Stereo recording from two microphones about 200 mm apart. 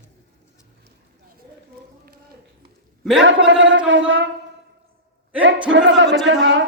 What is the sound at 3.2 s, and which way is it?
Speech, 65° right (ahead or behind).